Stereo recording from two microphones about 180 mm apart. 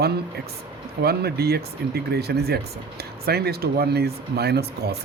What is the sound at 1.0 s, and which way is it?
Speech, 60° right (ahead or behind).